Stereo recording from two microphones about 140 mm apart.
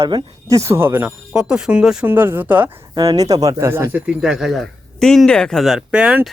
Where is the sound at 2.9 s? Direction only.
25° right (ahead or behind); by 6.3 s 5° right (ahead or behind).